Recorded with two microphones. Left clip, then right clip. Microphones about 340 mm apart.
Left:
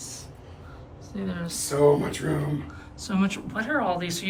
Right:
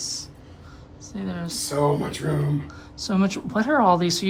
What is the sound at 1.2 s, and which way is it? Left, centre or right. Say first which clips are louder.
Speech: right 1 dB; centre.